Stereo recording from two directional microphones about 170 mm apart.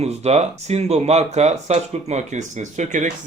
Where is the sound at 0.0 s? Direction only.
40° right (ahead or behind).